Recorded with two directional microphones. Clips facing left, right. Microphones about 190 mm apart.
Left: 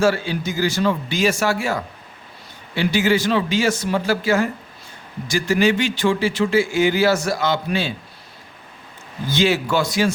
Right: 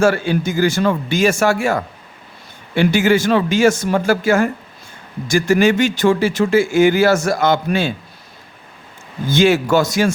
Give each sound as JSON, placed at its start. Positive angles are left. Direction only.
{"t": 0.0, "sound": "speech", "side_deg": -50}
{"t": 9.3, "sound": "speech", "side_deg": -50}